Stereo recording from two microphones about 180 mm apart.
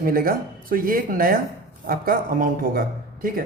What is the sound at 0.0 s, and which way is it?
A woman's voice, 55° right (ahead or behind).